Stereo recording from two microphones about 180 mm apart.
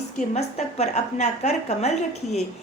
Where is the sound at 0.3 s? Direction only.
35° left (ahead or behind).